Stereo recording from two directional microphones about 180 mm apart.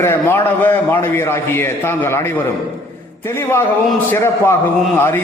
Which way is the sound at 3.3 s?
15° left (ahead or behind).